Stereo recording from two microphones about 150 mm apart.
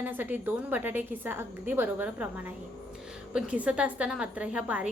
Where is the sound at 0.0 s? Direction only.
10° right (ahead or behind).